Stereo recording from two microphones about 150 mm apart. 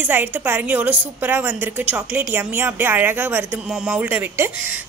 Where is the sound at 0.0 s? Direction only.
10° right (ahead or behind).